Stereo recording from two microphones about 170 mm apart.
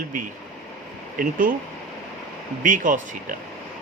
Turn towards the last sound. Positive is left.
turn(degrees=-50)  # may be behind; listen again after turning